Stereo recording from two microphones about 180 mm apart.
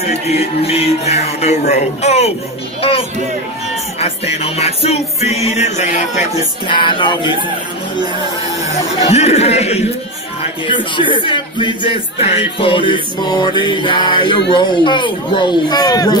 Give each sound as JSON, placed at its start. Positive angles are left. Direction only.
{"t": 0.0, "sound": "music", "side_deg": 35}
{"t": 4.0, "sound": "music", "side_deg": 35}
{"t": 6.7, "sound": "speech", "side_deg": 25}
{"t": 9.1, "sound": "music", "side_deg": 35}
{"t": 10.4, "sound": "speech", "side_deg": 30}